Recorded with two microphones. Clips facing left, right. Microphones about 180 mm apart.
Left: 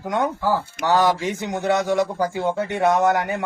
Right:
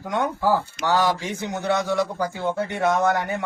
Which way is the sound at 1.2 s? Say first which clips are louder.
Left 3 dB; 20° left (ahead or behind).